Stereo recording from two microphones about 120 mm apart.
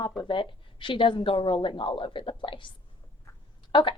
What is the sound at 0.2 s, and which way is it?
Speech, 40° left (ahead or behind).